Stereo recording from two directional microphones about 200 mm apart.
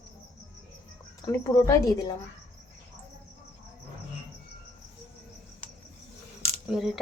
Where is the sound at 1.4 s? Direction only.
15° left (ahead or behind).